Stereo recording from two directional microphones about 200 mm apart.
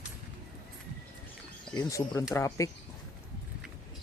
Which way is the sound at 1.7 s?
15° left (ahead or behind).